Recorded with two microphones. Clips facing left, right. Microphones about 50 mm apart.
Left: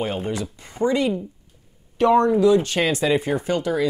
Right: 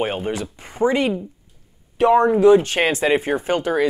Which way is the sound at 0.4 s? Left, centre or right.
Right.